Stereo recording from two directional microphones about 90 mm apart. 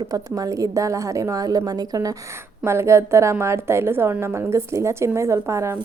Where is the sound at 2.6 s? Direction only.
30° right (ahead or behind).